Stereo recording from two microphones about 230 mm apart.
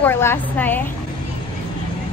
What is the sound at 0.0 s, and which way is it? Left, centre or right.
Speech, centre.